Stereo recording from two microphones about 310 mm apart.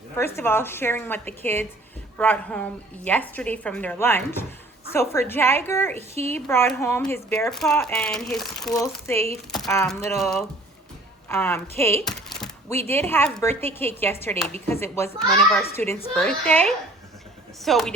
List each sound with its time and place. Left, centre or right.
0.3 s a woman's voice: centre
6.0 s speech: centre
6.3 s a woman's voice: centre